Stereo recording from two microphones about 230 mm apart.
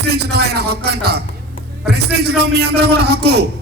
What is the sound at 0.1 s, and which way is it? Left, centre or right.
A man's voice, right.